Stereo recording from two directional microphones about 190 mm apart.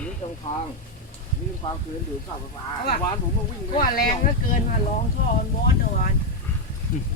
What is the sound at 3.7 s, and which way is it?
Speech, 45° left (ahead or behind).